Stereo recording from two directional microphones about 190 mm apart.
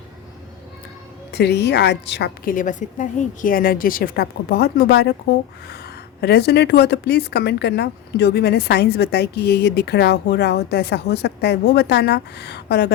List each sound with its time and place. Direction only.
1.3 s speech: 60° left (ahead or behind)
6.2 s speech: 60° left (ahead or behind)